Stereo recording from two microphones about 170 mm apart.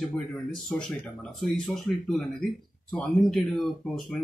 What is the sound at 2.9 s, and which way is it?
Speech, centre (ahead or behind).